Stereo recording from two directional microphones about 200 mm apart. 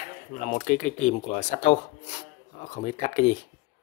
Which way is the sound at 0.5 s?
35° left (ahead or behind).